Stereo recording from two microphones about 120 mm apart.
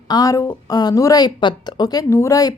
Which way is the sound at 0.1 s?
30° left (ahead or behind).